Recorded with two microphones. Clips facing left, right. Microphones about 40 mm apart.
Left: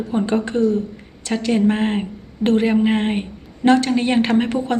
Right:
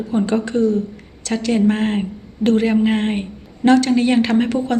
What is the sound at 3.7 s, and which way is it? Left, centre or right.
Speech, left.